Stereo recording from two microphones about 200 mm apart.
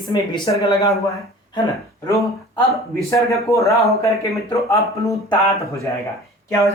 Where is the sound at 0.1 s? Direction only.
20° left (ahead or behind).